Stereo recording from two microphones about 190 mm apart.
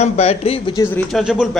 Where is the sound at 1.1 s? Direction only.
5° right (ahead or behind).